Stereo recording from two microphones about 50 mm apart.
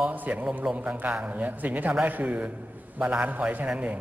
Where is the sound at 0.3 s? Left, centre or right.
Right.